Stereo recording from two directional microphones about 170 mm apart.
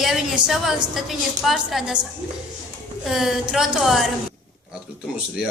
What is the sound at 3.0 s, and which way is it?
A woman's voice, centre (ahead or behind).